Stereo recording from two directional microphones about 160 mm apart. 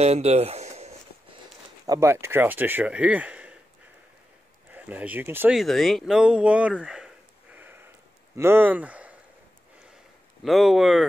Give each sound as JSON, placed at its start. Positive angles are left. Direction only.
{"t": 0.0, "sound": "a sound", "side_deg": -40}
{"t": 1.9, "sound": "speech", "side_deg": -15}
{"t": 4.7, "sound": "speech", "side_deg": -10}
{"t": 5.6, "sound": "speech", "side_deg": 0}
{"t": 7.5, "sound": "sniff", "side_deg": -15}
{"t": 8.4, "sound": "speech", "side_deg": -15}
{"t": 10.4, "sound": "speech", "side_deg": 0}